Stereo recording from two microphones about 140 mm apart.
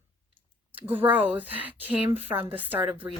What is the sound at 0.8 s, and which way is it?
A woman's voice, 15° right (ahead or behind).